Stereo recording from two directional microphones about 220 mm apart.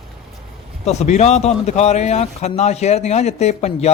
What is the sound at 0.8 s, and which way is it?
Speech, 30° left (ahead or behind).